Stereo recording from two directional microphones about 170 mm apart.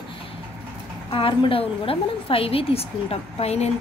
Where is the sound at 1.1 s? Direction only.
30° left (ahead or behind).